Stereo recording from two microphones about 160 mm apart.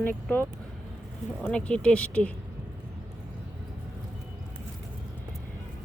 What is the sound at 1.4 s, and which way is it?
Speech, 5° left (ahead or behind).